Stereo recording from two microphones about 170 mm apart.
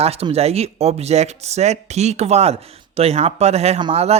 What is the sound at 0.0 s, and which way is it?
Speech, 35° right (ahead or behind).